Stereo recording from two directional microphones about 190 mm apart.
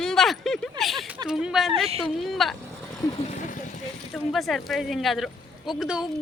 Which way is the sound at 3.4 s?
40° left (ahead or behind).